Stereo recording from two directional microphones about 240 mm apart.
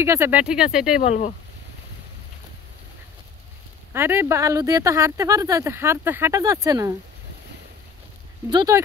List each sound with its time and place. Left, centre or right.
0.0 s speech: centre
0.9 s speech: left
3.9 s speech: centre
8.5 s speech: centre